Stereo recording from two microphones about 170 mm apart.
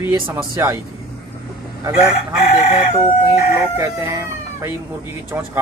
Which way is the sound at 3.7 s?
20° right (ahead or behind).